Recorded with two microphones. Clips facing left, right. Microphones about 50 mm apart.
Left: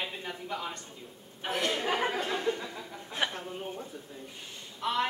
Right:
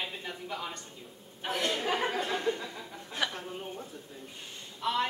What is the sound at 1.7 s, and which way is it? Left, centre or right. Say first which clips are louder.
Speech: left 1 dB; centre.